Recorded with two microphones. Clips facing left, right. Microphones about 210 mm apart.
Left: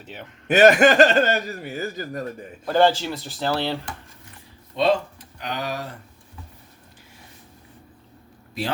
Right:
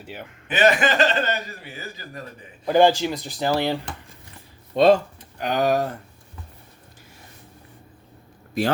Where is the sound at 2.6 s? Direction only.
15° right (ahead or behind).